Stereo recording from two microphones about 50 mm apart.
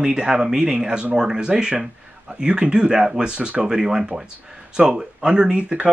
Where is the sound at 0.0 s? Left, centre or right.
Centre.